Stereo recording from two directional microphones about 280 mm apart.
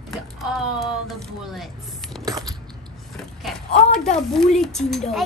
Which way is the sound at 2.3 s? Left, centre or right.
Centre.